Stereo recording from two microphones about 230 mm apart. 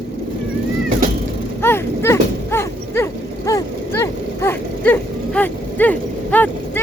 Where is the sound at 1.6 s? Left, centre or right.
Centre.